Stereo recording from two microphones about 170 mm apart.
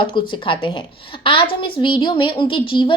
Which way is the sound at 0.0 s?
30° left (ahead or behind).